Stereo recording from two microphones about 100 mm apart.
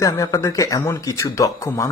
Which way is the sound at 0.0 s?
30° left (ahead or behind).